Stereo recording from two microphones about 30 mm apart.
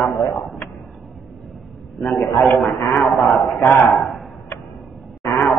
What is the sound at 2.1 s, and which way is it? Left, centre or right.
A man's voice, centre.